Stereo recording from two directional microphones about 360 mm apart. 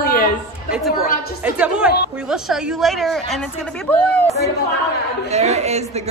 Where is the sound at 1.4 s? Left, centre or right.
Centre.